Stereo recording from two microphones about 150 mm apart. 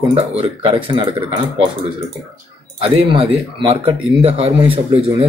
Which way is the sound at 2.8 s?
35° right (ahead or behind).